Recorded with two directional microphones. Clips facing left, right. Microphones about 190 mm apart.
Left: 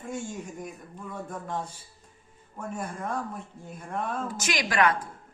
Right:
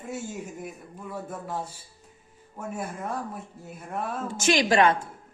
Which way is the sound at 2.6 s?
5° right (ahead or behind).